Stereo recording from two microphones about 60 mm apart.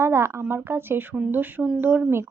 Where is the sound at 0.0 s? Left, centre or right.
Right.